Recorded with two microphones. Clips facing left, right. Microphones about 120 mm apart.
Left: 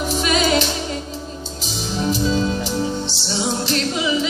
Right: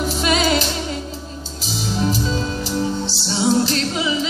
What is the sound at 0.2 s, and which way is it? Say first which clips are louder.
Music: right 1 dB; 30° right (ahead or behind).